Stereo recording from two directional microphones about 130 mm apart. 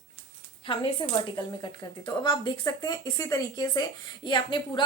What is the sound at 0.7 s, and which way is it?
Speech, 40° left (ahead or behind).